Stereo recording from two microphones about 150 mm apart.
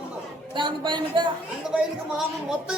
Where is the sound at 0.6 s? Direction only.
30° right (ahead or behind).